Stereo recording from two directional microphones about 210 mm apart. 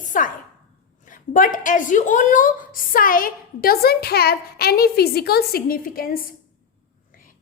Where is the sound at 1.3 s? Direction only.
40° left (ahead or behind).